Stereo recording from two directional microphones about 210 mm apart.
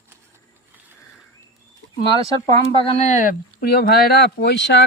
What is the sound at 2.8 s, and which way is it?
Speech, 30° left (ahead or behind).